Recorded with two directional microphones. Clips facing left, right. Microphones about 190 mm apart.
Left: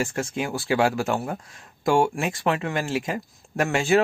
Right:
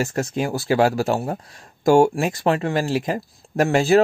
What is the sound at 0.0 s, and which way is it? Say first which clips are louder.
Speech: right 4 dB; 40° right (ahead or behind).